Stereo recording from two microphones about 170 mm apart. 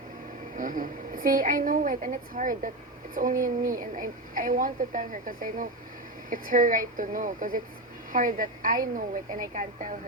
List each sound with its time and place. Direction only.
0.5 s a woman's voice: 50° right (ahead or behind)